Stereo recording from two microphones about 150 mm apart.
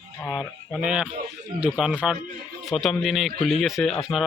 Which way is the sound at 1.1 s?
55° right (ahead or behind).